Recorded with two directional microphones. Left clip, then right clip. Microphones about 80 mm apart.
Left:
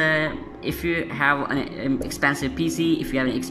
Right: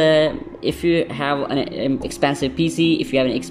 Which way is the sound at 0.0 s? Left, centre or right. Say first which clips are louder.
Right 6 dB; right.